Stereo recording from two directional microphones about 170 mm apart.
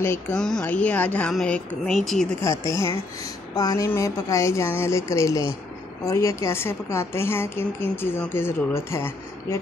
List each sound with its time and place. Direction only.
0.0 s a woman's voice: 15° left (ahead or behind)
2.4 s a woman's voice: 20° left (ahead or behind)